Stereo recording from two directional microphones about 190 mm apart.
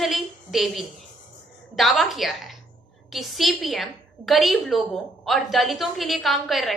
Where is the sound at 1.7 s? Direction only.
Centre (ahead or behind).